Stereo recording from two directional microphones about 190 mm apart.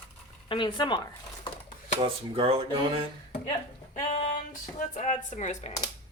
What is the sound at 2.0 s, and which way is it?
Speech, 30° right (ahead or behind).